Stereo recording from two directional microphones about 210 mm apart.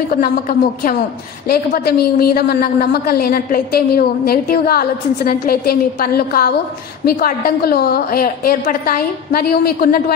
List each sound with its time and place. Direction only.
0.1 s a woman's voice: 45° left (ahead or behind)